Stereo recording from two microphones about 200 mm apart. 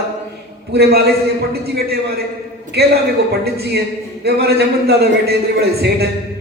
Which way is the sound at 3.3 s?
50° right (ahead or behind).